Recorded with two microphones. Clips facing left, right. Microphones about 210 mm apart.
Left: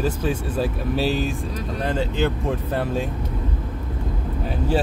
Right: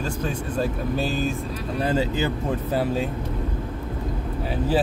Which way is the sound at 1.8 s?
5° right (ahead or behind).